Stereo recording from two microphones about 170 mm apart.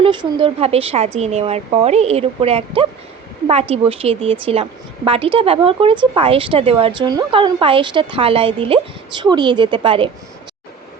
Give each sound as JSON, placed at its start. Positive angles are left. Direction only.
{"t": 0.0, "sound": "speech", "side_deg": -30}